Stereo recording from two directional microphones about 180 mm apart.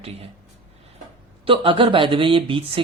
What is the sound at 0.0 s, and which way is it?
Speech, 35° right (ahead or behind).